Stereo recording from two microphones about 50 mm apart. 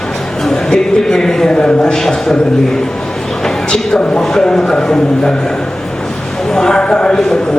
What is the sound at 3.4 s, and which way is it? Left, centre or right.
A man's voice, centre.